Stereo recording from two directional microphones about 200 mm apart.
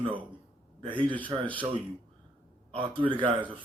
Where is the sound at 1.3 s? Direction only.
20° right (ahead or behind).